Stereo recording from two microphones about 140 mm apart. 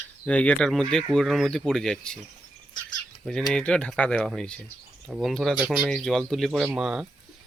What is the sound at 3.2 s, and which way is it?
Speech, 5° left (ahead or behind).